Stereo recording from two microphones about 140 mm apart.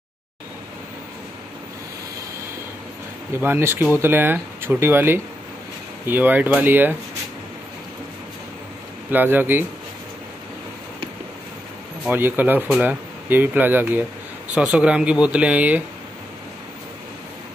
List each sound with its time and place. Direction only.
3.3 s speech: 15° right (ahead or behind)
9.1 s speech: 15° right (ahead or behind)
12.1 s speech: 15° right (ahead or behind)